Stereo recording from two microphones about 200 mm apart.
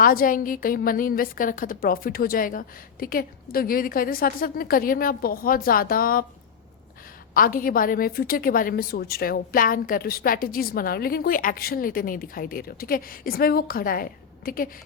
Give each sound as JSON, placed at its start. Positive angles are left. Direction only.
{"t": 0.0, "sound": "a woman's voice", "side_deg": 45}
{"t": 7.3, "sound": "a woman's voice", "side_deg": 45}